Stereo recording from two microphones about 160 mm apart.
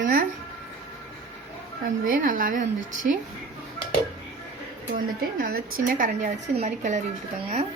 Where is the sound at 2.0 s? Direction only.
60° right (ahead or behind).